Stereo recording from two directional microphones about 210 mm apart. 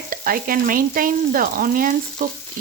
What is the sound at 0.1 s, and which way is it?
Frying, 45° right (ahead or behind).